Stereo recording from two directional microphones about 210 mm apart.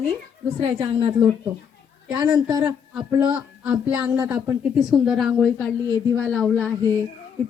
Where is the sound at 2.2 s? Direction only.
5° right (ahead or behind).